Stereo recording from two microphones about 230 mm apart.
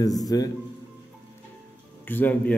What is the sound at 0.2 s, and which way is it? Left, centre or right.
Speech, centre.